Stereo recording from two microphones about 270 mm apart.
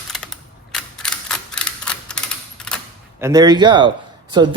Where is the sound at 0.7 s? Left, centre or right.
Centre.